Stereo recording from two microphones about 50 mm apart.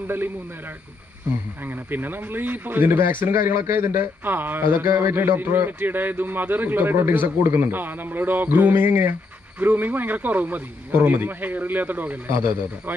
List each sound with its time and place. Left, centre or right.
0.0 s a man's voice: right
1.9 s a man's voice: right
12.3 s a man's voice: right